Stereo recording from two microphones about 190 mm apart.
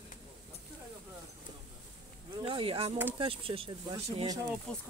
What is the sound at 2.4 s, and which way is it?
Speech, 30° right (ahead or behind).